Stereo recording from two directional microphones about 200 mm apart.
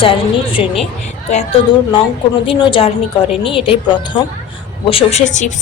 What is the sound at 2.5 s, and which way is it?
A woman's voice, 25° left (ahead or behind).